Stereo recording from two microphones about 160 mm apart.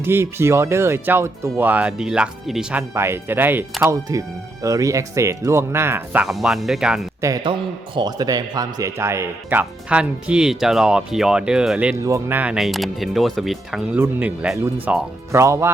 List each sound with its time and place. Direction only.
0.0 s speech: 15° right (ahead or behind)
2.9 s speech: 15° right (ahead or behind)
6.2 s speech: centre (ahead or behind)
7.2 s a man's voice: 20° right (ahead or behind); by 11.9 s 5° right (ahead or behind)
12.0 s speech: 15° right (ahead or behind)